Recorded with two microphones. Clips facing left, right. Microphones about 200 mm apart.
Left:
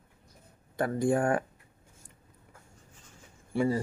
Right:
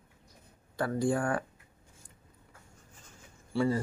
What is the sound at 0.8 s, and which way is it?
Speech, 20° left (ahead or behind).